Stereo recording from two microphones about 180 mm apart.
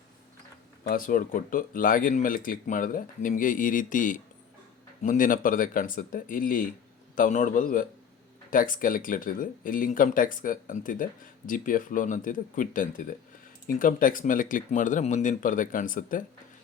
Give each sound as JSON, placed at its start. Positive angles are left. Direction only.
{"t": 0.9, "sound": "speech", "side_deg": 50}